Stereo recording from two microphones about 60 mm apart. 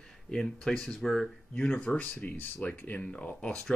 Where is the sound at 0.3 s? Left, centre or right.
Centre.